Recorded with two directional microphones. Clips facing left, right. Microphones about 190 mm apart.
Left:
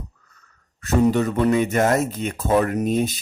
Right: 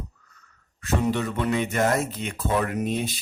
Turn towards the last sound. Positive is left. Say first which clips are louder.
# left 5 dB
turn(degrees=45)  # may be behind; listen again after turning